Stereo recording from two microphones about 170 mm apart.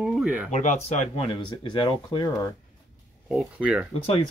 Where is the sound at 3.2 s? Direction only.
5° right (ahead or behind).